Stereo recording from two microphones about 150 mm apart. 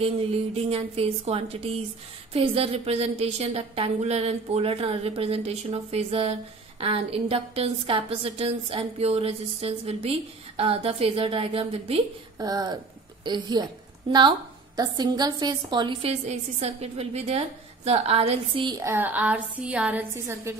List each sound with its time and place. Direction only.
0.0 s a woman's voice: 40° right (ahead or behind)
12.4 s a woman's voice: 25° right (ahead or behind)
18.8 s a woman's voice: 15° right (ahead or behind)